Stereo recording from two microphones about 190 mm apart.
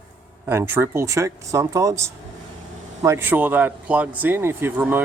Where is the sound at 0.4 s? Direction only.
15° right (ahead or behind).